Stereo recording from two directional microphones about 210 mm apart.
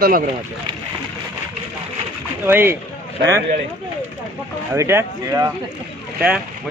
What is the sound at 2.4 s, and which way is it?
Speech, 10° right (ahead or behind).